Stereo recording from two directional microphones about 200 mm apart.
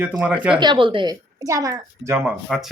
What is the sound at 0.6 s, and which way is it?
A woman's voice, 25° right (ahead or behind).